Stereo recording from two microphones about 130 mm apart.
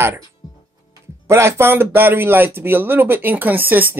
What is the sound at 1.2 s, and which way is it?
Speech, 20° right (ahead or behind).